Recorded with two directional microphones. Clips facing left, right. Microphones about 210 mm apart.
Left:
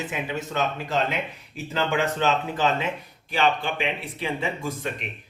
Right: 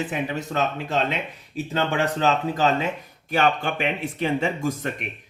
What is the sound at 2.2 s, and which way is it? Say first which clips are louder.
Speech: right 2 dB; 40° right (ahead or behind).